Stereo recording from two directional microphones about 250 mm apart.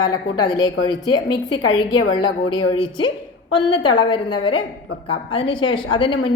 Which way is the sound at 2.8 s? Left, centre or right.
Centre.